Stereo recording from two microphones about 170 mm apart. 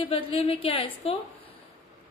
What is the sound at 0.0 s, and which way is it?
A woman's voice, 35° left (ahead or behind).